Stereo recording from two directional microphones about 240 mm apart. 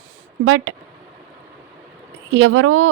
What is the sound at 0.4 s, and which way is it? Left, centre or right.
Speech, right.